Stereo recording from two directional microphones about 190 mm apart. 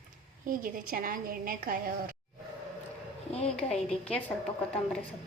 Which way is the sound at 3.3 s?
35° left (ahead or behind).